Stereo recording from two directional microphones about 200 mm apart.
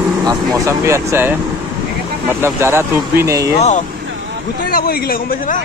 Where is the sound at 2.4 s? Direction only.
15° right (ahead or behind).